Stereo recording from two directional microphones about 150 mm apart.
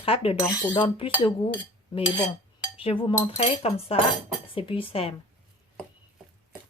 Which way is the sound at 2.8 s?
40° left (ahead or behind).